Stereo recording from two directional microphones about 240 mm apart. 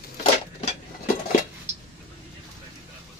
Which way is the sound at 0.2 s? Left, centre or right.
Left.